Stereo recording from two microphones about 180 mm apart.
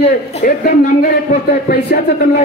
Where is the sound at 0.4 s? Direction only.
50° left (ahead or behind).